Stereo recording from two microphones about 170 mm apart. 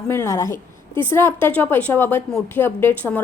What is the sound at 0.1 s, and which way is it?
Speech, 15° left (ahead or behind).